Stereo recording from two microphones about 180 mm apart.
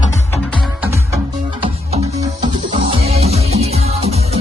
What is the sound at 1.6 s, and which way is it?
Music, 35° right (ahead or behind).